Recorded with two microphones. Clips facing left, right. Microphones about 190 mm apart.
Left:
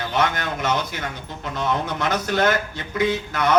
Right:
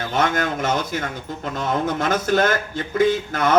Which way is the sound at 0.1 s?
50° right (ahead or behind).